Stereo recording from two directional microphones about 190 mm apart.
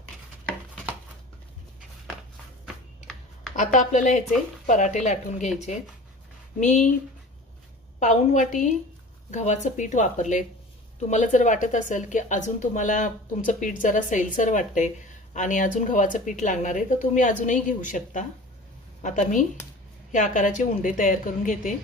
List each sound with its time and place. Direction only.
2.6 s typing: 5° left (ahead or behind)
3.5 s a woman's voice: 40° left (ahead or behind)
6.6 s a woman's voice: 40° left (ahead or behind)
8.0 s a woman's voice: 40° left (ahead or behind)